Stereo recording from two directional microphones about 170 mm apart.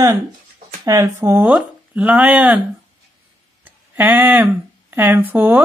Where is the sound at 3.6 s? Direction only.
10° right (ahead or behind).